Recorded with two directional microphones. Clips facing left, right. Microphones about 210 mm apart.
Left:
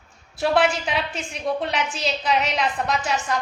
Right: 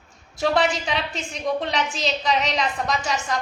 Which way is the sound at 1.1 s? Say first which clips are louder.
Even; 35° right (ahead or behind).